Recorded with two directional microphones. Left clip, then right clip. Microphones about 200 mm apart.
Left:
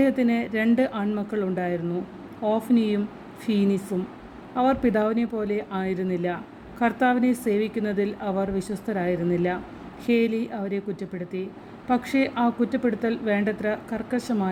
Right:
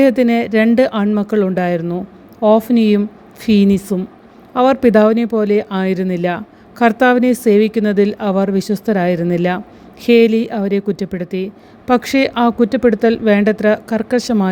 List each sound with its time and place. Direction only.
0.0 s speech: 45° right (ahead or behind)